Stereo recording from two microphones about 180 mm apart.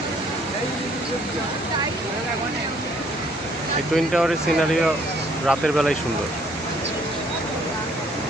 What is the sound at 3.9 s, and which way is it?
Speech, centre (ahead or behind).